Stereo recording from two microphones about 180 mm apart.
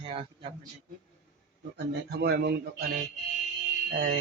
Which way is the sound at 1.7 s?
70° right (ahead or behind).